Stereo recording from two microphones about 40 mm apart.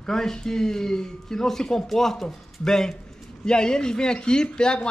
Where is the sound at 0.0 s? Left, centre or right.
Centre.